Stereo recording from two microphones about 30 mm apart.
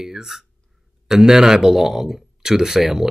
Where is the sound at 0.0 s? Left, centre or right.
Centre.